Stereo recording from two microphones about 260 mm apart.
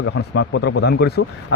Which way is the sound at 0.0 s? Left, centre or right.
Left.